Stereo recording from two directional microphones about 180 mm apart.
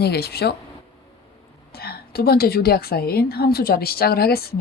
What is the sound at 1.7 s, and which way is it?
A woman's voice, 60° left (ahead or behind).